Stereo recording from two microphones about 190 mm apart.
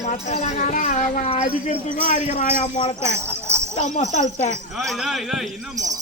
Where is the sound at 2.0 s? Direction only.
45° left (ahead or behind).